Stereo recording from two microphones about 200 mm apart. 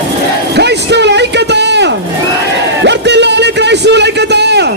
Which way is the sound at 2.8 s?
60° right (ahead or behind).